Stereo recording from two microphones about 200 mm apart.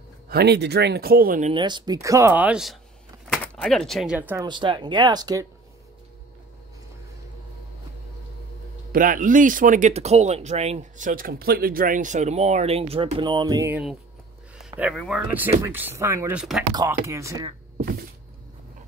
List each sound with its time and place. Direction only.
0.3 s speech: 55° right (ahead or behind)
1.5 s speech: 20° right (ahead or behind)
4.5 s speech: 25° right (ahead or behind)
8.9 s speech: 45° right (ahead or behind); by 13.7 s 20° right (ahead or behind)
14.8 s speech: 5° right (ahead or behind)
17.7 s cat: 50° right (ahead or behind)